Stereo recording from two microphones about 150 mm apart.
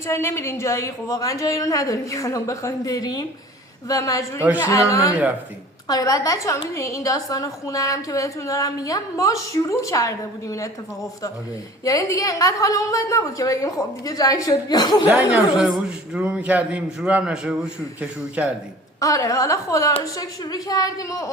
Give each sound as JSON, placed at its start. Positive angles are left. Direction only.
{"t": 0.1, "sound": "a woman's voice", "side_deg": 20}
{"t": 11.9, "sound": "a woman's voice", "side_deg": 20}
{"t": 15.0, "sound": "a man's voice", "side_deg": -10}
{"t": 18.9, "sound": "a woman's voice", "side_deg": 20}